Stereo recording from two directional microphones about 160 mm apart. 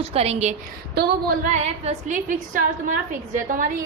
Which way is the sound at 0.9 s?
90° right.